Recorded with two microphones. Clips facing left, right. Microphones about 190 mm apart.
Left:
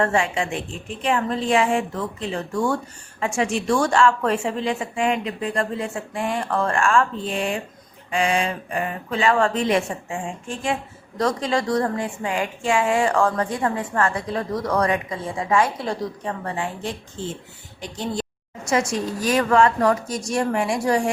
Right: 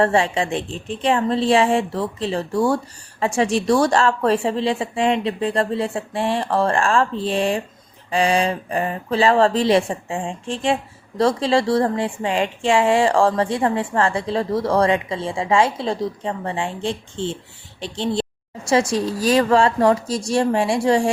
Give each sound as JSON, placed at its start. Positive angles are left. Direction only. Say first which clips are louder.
{"t": 0.0, "sound": "a woman's voice", "louder": "right 3 dB", "side_deg": -30}